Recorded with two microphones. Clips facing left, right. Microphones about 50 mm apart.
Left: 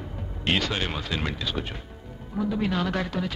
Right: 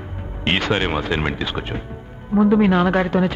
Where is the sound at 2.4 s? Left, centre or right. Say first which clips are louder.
Right 11 dB; right.